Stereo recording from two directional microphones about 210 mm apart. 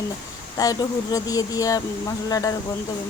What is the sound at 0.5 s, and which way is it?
A woman's voice, 15° left (ahead or behind).